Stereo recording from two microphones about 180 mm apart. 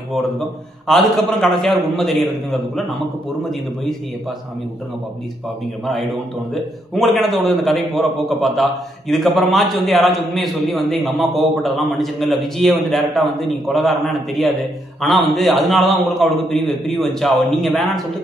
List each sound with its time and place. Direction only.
0.1 s a man's voice: centre (ahead or behind)
5.9 s a man's voice: centre (ahead or behind)